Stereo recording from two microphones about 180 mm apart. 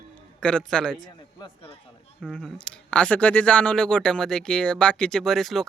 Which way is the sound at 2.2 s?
5° left (ahead or behind).